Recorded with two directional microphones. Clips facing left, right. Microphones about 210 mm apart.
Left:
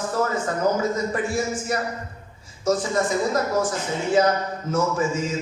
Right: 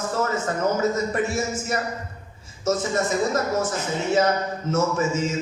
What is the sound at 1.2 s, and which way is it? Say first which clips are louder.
Speech: left 1 dB; 25° right (ahead or behind).